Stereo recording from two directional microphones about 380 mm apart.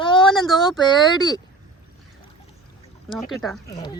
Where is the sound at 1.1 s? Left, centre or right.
Centre.